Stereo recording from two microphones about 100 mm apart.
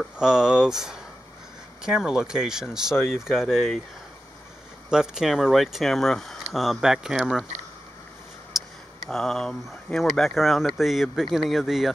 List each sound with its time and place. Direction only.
0.0 s speech: 5° right (ahead or behind)
4.8 s speech: 5° right (ahead or behind)
8.5 s speech: centre (ahead or behind)